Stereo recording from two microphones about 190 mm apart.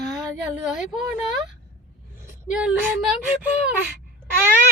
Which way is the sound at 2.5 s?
5° right (ahead or behind).